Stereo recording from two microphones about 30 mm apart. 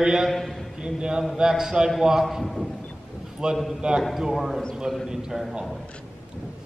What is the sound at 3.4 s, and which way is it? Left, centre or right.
Speech, right.